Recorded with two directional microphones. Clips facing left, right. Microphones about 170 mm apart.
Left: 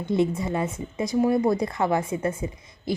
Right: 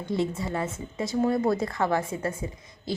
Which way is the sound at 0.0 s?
20° left (ahead or behind).